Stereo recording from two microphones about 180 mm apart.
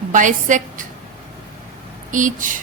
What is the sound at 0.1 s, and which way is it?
Speech, 45° right (ahead or behind).